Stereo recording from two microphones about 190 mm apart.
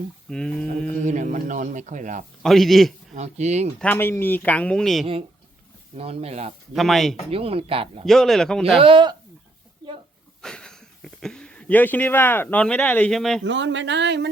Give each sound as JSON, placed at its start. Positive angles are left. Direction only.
{"t": 0.3, "sound": "speech", "side_deg": 5}
{"t": 1.0, "sound": "speech", "side_deg": -40}
{"t": 2.4, "sound": "a man's voice", "side_deg": 0}
{"t": 3.2, "sound": "speech", "side_deg": -35}
{"t": 3.8, "sound": "speech", "side_deg": 10}
{"t": 6.0, "sound": "speech", "side_deg": -30}
{"t": 6.7, "sound": "speech", "side_deg": 0}
{"t": 7.3, "sound": "speech", "side_deg": -30}
{"t": 8.0, "sound": "speech", "side_deg": 0}
{"t": 8.8, "sound": "speech", "side_deg": -25}
{"t": 10.4, "sound": "speech", "side_deg": 5}
{"t": 13.4, "sound": "speech", "side_deg": -75}